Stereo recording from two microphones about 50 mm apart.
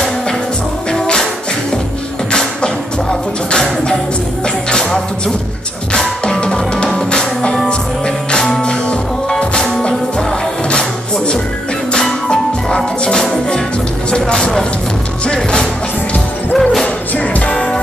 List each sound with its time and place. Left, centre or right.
0.9 s music: centre
2.3 s music: centre
5.9 s drum: centre
7.1 s music: centre
17.2 s music: left